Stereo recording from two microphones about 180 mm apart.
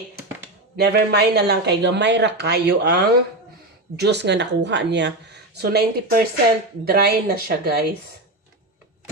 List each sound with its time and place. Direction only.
0.8 s speech: 70° right (ahead or behind)